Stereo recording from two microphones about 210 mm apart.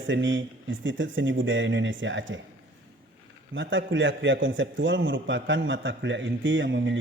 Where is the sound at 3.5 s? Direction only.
60° right (ahead or behind).